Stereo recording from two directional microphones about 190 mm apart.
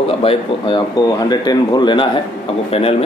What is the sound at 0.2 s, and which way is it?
A man's voice, 30° left (ahead or behind).